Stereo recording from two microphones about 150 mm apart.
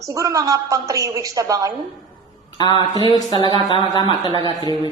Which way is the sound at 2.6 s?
30° left (ahead or behind).